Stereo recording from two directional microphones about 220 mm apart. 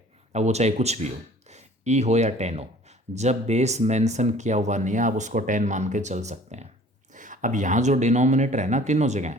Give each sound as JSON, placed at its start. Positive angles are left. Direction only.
{"t": 0.3, "sound": "speech", "side_deg": -30}